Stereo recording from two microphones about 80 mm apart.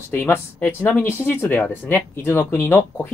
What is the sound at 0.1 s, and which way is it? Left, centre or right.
Speech, left.